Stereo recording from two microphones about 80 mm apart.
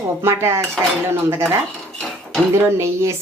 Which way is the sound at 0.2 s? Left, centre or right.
Right.